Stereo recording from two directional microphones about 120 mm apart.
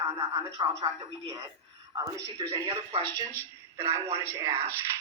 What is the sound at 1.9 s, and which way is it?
Speech, 30° right (ahead or behind).